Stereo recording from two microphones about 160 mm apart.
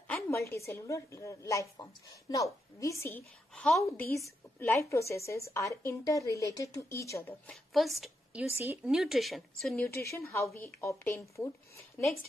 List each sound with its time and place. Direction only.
0.1 s a woman's voice: 15° left (ahead or behind)
7.7 s a woman's voice: centre (ahead or behind)
9.8 s a woman's voice: 15° left (ahead or behind)